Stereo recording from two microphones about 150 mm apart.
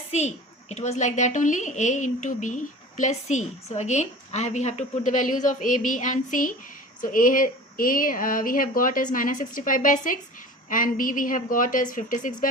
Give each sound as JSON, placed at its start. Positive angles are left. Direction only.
{"t": 0.1, "sound": "a woman's voice", "side_deg": 50}